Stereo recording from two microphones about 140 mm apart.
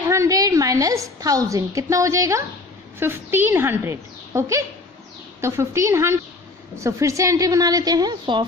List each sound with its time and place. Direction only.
0.1 s a woman's voice: 20° right (ahead or behind)